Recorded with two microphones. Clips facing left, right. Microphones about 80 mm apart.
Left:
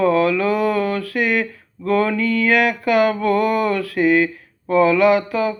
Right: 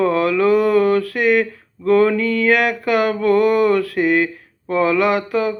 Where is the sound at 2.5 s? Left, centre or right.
Centre.